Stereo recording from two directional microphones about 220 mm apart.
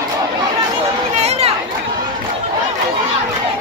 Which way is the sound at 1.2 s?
30° right (ahead or behind).